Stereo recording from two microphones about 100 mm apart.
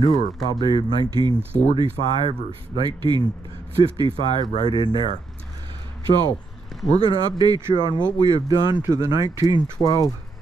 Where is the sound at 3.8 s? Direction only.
55° right (ahead or behind).